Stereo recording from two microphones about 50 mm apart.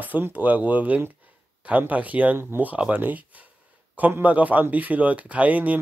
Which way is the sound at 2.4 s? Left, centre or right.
Right.